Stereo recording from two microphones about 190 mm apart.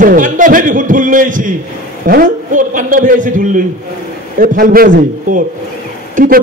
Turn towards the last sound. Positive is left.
turn(degrees=-45)  # may be behind; listen again after turning